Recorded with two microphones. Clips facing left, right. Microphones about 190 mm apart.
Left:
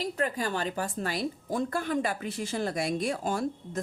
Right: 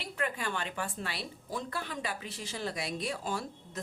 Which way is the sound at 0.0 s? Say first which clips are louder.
Left 6 dB; 40° left (ahead or behind).